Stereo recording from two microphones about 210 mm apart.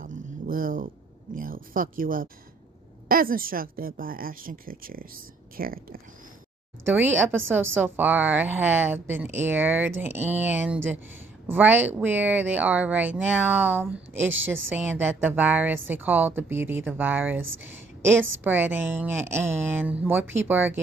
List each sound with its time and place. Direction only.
0.0 s a sound: 40° right (ahead or behind)
1.3 s a woman's voice: 40° right (ahead or behind)
6.8 s a woman's voice: 10° right (ahead or behind)
17.4 s speech: 65° right (ahead or behind)
18.4 s a woman's voice: 10° right (ahead or behind)